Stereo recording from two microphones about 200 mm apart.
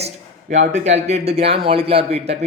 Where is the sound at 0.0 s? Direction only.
35° right (ahead or behind).